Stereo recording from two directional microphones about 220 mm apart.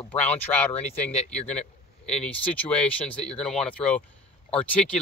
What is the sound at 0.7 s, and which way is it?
Speech, 30° left (ahead or behind).